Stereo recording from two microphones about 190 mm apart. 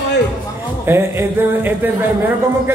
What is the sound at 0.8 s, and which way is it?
Music, 10° right (ahead or behind).